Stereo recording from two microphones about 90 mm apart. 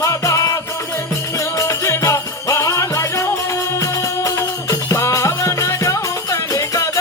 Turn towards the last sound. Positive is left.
turn(degrees=35)  # may be behind; listen again after turning